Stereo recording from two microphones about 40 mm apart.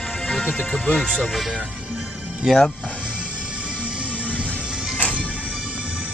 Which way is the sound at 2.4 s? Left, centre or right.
Centre.